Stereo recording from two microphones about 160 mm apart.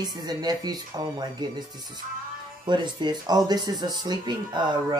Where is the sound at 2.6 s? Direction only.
30° right (ahead or behind).